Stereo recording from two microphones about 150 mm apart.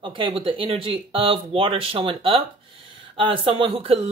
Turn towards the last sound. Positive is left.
turn(degrees=-40)  # may be behind; listen again after turning